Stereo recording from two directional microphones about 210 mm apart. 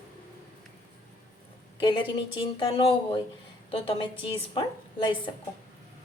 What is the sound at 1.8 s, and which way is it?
A woman's voice, 20° left (ahead or behind).